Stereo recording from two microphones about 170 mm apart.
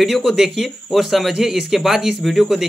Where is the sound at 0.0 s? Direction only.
Centre (ahead or behind).